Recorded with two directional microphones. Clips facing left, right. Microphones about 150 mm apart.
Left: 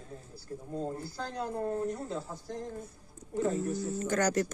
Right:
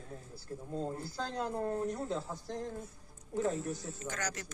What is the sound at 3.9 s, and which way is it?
Speech, 45° left (ahead or behind).